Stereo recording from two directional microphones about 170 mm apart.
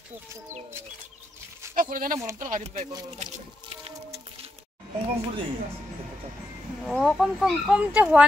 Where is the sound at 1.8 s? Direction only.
55° right (ahead or behind).